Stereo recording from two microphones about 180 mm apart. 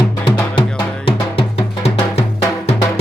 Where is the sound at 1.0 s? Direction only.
30° left (ahead or behind).